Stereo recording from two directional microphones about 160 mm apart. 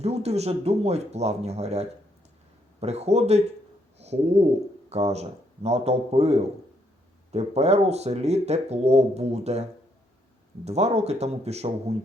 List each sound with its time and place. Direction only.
0.0 s speech: 40° right (ahead or behind)
10.7 s speech: 40° right (ahead or behind)